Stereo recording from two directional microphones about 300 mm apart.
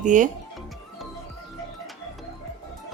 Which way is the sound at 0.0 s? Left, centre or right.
Right.